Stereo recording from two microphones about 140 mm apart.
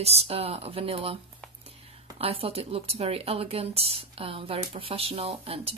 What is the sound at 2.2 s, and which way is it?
Speech, 45° right (ahead or behind).